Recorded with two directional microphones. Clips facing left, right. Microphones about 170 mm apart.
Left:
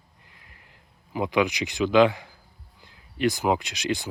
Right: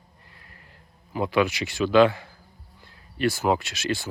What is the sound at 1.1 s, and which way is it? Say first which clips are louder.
Speech: right 1 dB; 15° left (ahead or behind).